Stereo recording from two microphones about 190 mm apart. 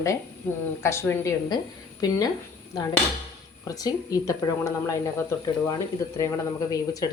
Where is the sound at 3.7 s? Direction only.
20° left (ahead or behind).